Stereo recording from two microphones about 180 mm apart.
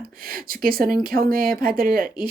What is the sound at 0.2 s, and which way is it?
Speech, 55° right (ahead or behind).